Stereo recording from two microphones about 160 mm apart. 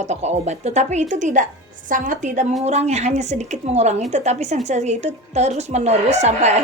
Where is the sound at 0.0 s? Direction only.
45° right (ahead or behind).